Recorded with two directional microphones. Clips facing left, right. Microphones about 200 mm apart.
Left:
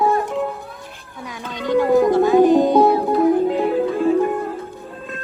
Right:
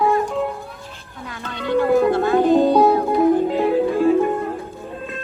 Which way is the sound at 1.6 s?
15° left (ahead or behind).